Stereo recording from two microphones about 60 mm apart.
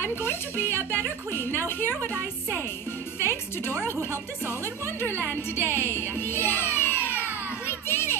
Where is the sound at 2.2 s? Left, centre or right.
Right.